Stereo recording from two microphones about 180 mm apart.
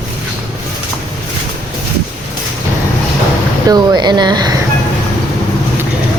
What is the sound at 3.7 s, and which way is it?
Speech, 25° right (ahead or behind).